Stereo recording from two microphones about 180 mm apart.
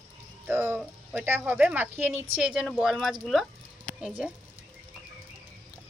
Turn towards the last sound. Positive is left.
turn(degrees=-5)  # may be behind; listen again after turning